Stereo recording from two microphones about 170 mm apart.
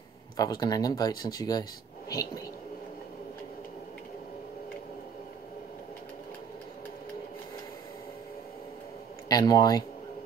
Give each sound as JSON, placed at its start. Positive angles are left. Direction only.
{"t": 0.4, "sound": "speech", "side_deg": 25}
{"t": 9.3, "sound": "speech", "side_deg": 20}